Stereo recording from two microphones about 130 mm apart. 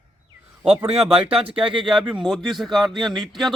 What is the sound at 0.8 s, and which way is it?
Speech, 50° right (ahead or behind).